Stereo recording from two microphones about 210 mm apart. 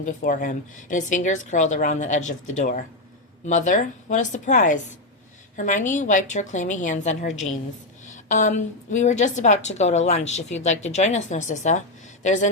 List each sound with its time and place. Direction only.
0.0 s a woman's voice: 35° left (ahead or behind)